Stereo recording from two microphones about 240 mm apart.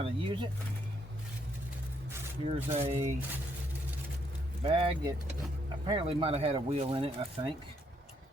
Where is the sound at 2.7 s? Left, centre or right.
Right.